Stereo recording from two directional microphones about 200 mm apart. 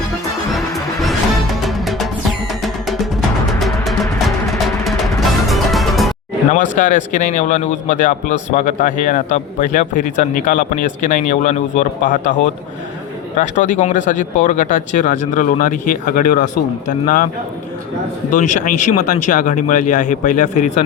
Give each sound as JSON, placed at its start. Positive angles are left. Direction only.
{"t": 0.4, "sound": "music", "side_deg": 0}
{"t": 6.5, "sound": "speech", "side_deg": 40}
{"t": 13.3, "sound": "speech", "side_deg": 40}
{"t": 18.3, "sound": "speech", "side_deg": 40}